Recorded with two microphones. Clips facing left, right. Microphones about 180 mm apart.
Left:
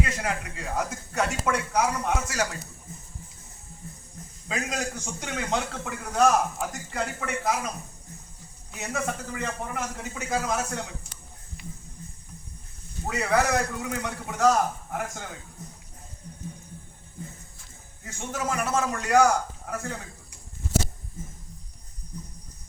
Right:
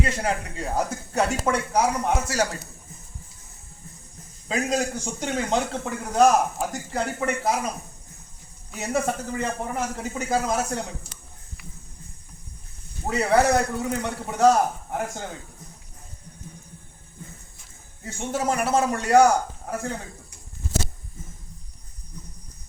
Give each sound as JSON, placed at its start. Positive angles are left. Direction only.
{"t": 0.0, "sound": "a man's voice", "side_deg": -30}
{"t": 4.4, "sound": "a man's voice", "side_deg": -35}
{"t": 8.9, "sound": "a man's voice", "side_deg": -35}
{"t": 13.1, "sound": "a man's voice", "side_deg": -30}
{"t": 18.0, "sound": "a man's voice", "side_deg": -30}